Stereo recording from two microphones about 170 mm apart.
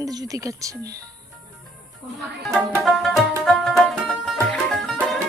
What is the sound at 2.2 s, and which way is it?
Music, centre (ahead or behind).